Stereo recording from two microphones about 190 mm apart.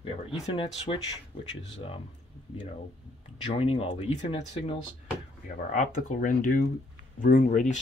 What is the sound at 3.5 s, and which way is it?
Speech, 30° left (ahead or behind).